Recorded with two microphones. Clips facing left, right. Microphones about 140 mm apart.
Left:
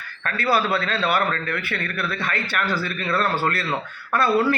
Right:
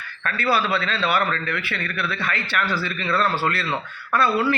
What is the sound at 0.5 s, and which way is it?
A man's voice, 45° left (ahead or behind).